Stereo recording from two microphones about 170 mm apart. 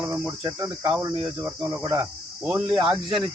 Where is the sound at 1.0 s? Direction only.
20° right (ahead or behind).